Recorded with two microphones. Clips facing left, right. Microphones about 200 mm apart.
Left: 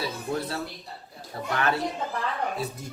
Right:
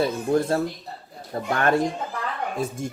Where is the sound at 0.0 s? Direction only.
50° right (ahead or behind).